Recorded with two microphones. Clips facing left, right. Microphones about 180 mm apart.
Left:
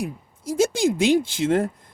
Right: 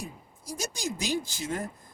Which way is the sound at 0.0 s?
90° left.